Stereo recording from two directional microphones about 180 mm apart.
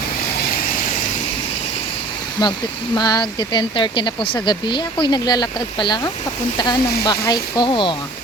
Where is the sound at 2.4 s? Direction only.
20° left (ahead or behind).